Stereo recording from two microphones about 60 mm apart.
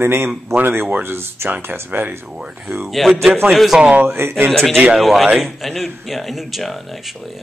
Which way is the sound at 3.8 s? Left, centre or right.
Centre.